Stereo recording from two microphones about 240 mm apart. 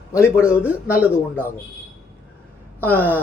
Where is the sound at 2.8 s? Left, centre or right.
Centre.